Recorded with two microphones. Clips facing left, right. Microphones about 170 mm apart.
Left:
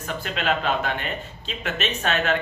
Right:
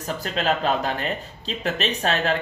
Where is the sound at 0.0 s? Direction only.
35° right (ahead or behind).